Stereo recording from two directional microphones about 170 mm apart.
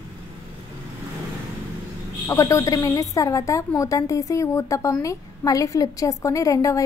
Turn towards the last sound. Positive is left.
turn(degrees=20)  # may be behind; listen again after turning